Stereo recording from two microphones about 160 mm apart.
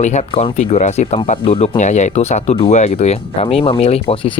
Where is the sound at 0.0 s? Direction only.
45° left (ahead or behind).